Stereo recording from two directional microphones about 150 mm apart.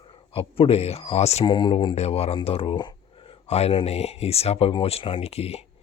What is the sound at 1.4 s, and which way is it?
Speech, 30° left (ahead or behind).